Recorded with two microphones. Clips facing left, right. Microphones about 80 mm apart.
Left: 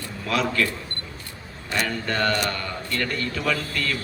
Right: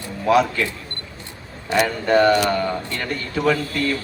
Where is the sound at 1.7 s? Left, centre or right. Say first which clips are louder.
Right 9 dB; centre.